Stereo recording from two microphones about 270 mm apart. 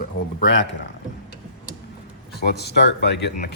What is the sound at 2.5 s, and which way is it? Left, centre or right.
Speech, left.